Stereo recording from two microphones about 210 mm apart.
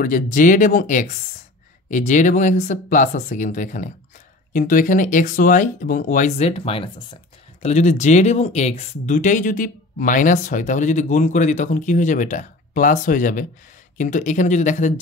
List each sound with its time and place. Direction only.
0.0 s speech: 40° left (ahead or behind)